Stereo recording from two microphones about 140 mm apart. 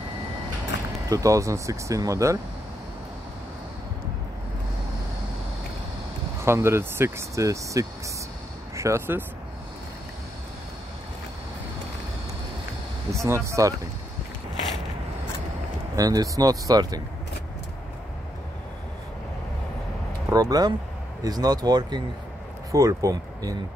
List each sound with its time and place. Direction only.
1.0 s speech: 25° right (ahead or behind)
6.4 s speech: 20° right (ahead or behind)
13.1 s speech: 20° right (ahead or behind)
16.0 s speech: 25° right (ahead or behind)
20.2 s speech: 25° right (ahead or behind)